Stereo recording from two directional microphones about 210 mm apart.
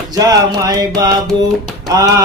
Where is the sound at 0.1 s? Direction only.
15° right (ahead or behind).